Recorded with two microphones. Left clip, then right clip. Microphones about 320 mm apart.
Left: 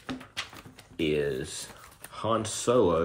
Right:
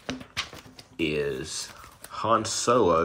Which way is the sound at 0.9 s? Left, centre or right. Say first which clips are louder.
Even; centre.